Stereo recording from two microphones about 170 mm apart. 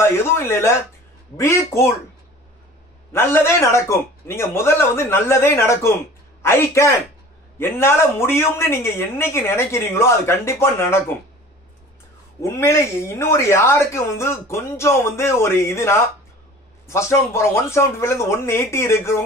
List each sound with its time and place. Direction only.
0.0 s speech: 15° left (ahead or behind)
3.1 s speech: 15° left (ahead or behind)
12.4 s speech: 15° left (ahead or behind)